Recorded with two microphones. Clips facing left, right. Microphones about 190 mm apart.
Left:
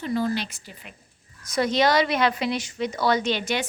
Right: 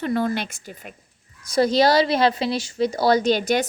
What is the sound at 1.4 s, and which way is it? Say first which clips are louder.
Speech: right 4 dB; 35° right (ahead or behind).